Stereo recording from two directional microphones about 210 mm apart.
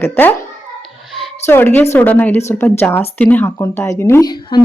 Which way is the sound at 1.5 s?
10° left (ahead or behind).